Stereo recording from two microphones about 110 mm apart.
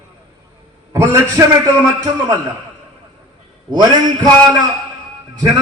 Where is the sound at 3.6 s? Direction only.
40° right (ahead or behind).